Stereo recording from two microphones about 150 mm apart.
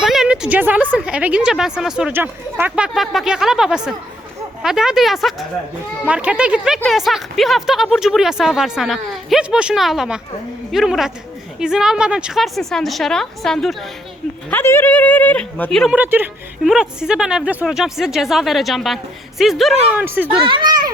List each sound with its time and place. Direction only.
0.0 s a woman's voice: centre (ahead or behind)
14.5 s speech: 15° left (ahead or behind)
15.9 s a woman's voice: 10° right (ahead or behind)
19.9 s speech: 10° right (ahead or behind)
20.4 s a child's voice: 35° right (ahead or behind)